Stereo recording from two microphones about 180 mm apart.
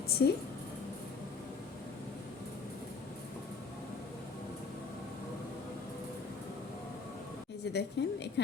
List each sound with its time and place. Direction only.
0.2 s a woman's voice: 65° left (ahead or behind)
7.6 s a woman's voice: 70° left (ahead or behind)